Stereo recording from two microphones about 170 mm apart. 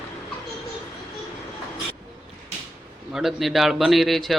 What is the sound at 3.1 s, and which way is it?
A man's voice, centre (ahead or behind).